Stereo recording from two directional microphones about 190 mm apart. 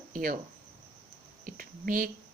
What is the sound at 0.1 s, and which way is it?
Cricket, 50° right (ahead or behind).